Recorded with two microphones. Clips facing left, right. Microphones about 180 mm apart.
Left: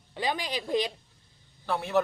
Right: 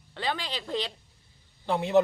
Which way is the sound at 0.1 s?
15° left (ahead or behind).